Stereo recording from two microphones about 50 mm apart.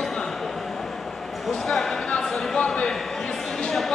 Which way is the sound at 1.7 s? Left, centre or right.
Centre.